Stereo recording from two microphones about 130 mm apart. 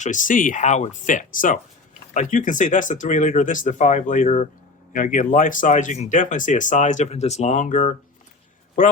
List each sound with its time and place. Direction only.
0.0 s speech: 80° left
4.9 s speech: 90° left